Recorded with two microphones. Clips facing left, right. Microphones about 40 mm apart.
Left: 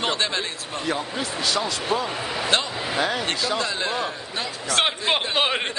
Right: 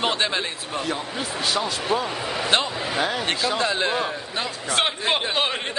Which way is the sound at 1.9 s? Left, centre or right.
Centre.